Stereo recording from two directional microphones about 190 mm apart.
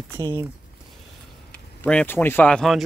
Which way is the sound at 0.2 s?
15° right (ahead or behind).